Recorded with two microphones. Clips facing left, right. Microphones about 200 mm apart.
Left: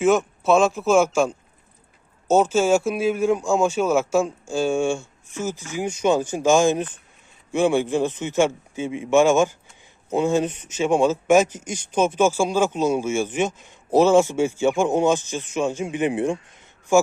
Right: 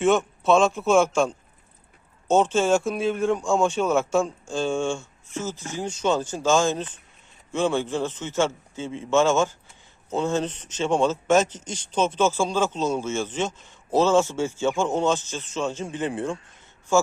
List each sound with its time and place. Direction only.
0.0 s a man's voice: 5° left (ahead or behind)